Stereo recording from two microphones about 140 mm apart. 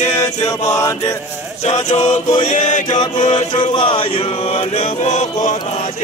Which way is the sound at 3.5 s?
35° left (ahead or behind).